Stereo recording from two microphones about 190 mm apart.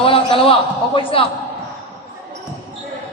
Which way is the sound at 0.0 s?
30° left (ahead or behind).